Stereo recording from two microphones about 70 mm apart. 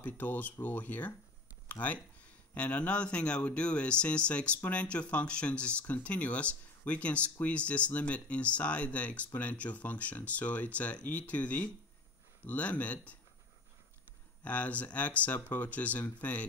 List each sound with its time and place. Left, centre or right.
0.0 s speech: left
14.4 s speech: centre